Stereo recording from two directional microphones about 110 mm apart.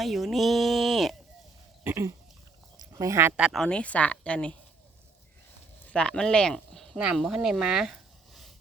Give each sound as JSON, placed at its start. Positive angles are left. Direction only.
{"t": 0.0, "sound": "speech", "side_deg": 0}
{"t": 1.8, "sound": "a sound", "side_deg": -20}
{"t": 3.5, "sound": "a woman's voice", "side_deg": 5}
{"t": 5.8, "sound": "speech", "side_deg": 10}